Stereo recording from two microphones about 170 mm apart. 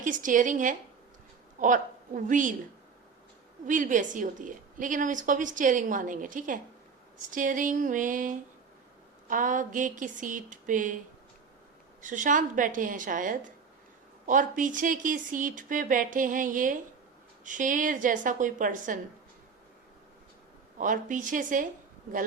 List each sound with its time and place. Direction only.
0.0 s a woman's voice: 50° right (ahead or behind)
3.7 s a woman's voice: 50° right (ahead or behind)
12.0 s a woman's voice: 50° right (ahead or behind)
20.7 s a woman's voice: 50° right (ahead or behind)